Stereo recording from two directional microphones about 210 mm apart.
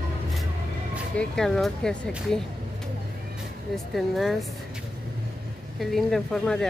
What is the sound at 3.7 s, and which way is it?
Speech, centre (ahead or behind).